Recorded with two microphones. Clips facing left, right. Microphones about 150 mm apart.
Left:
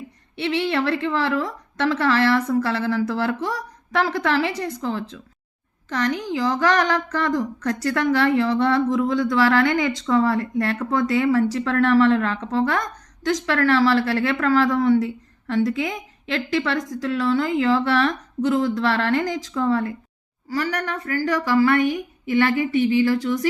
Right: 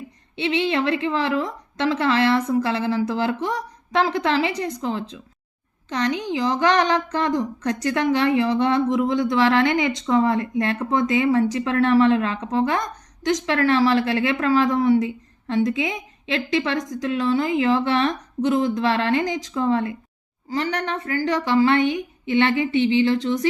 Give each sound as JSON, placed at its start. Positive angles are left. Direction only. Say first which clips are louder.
{"t": 0.3, "sound": "a woman's voice", "louder": "right 1 dB", "side_deg": -20}